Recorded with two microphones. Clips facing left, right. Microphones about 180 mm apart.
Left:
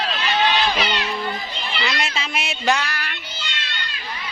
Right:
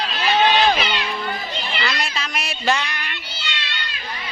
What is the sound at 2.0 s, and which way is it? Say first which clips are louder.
Speech: left 1 dB; 25° left (ahead or behind).